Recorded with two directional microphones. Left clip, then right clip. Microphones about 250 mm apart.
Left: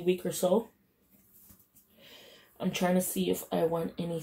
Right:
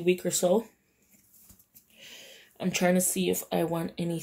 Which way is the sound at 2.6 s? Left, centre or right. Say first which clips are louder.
Right 3 dB; right.